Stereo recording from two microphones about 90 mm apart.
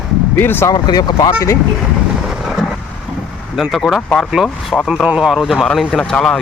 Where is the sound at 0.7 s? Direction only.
50° left (ahead or behind).